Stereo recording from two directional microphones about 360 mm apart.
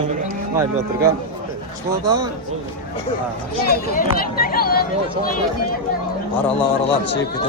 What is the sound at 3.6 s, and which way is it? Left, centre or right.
Speech, left.